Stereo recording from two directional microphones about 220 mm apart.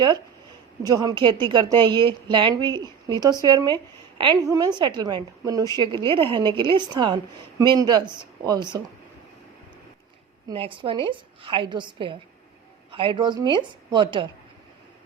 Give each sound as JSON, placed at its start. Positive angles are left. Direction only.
{"t": 0.8, "sound": "a woman's voice", "side_deg": -15}
{"t": 10.5, "sound": "a woman's voice", "side_deg": -25}